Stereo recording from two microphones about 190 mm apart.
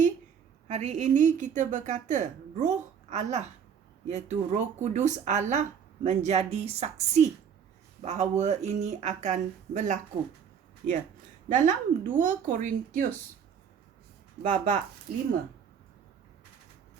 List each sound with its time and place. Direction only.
0.7 s speech: 35° right (ahead or behind)
11.4 s a woman's voice: 40° right (ahead or behind)
14.4 s speech: 40° right (ahead or behind)